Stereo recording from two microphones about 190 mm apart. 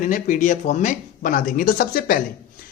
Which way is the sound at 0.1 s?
40° left (ahead or behind).